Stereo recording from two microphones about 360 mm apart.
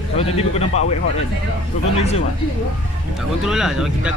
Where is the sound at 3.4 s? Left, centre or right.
Centre.